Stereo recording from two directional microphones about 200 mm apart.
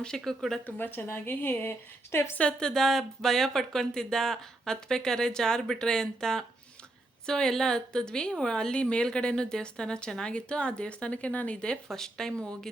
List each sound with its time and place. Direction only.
0.0 s a woman's voice: 5° left (ahead or behind)